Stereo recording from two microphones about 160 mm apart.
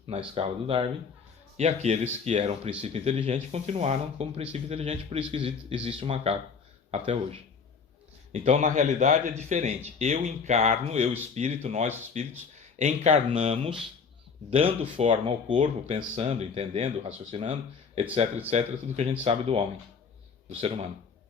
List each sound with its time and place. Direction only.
0.1 s speech: 35° right (ahead or behind)